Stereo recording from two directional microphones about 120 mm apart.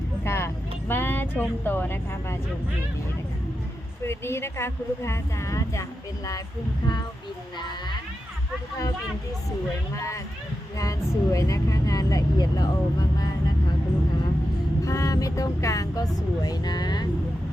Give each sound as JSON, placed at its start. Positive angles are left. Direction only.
{"t": 0.3, "sound": "vehicle", "side_deg": 20}
{"t": 4.0, "sound": "speech", "side_deg": 20}
{"t": 9.9, "sound": "speech", "side_deg": 25}
{"t": 14.8, "sound": "speech", "side_deg": 30}